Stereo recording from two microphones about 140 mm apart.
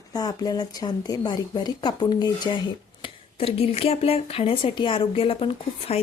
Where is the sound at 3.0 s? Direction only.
40° left (ahead or behind).